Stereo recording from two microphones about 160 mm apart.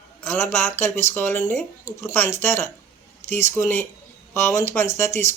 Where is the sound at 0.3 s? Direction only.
15° left (ahead or behind).